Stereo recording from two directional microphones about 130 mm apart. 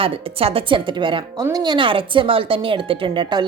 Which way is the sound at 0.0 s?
45° right (ahead or behind).